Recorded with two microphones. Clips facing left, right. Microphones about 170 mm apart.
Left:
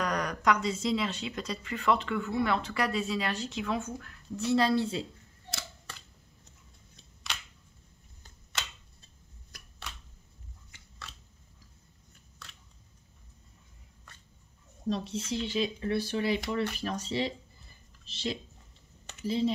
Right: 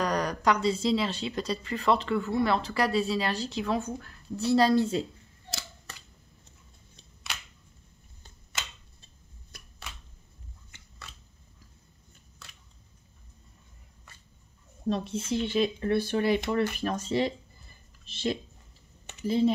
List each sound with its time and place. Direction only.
0.0 s speech: 35° right (ahead or behind)
14.9 s speech: 55° right (ahead or behind)